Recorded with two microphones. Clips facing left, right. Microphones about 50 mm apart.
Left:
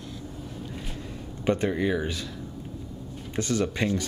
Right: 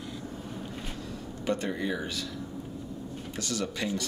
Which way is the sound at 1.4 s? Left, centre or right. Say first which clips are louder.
Left 5 dB; left.